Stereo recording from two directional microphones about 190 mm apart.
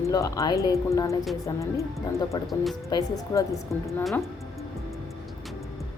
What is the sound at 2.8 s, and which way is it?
Speech, 20° left (ahead or behind).